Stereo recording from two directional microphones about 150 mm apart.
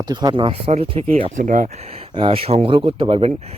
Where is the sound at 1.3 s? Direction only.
60° right (ahead or behind).